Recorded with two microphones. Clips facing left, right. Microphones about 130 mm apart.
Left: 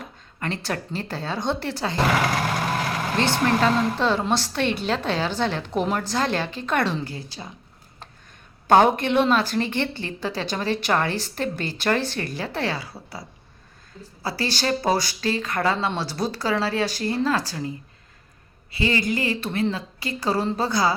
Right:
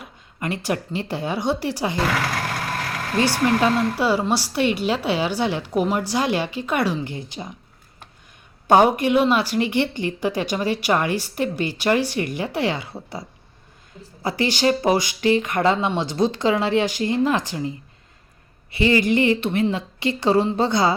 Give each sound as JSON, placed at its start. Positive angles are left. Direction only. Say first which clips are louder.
{"t": 0.0, "sound": "a woman's voice", "louder": "right 2 dB", "side_deg": -10}
{"t": 3.2, "sound": "a woman's voice", "louder": "right 3 dB", "side_deg": -10}
{"t": 8.6, "sound": "a woman's voice", "louder": "right 1 dB", "side_deg": -10}
{"t": 18.7, "sound": "speech", "louder": "right 5 dB", "side_deg": -20}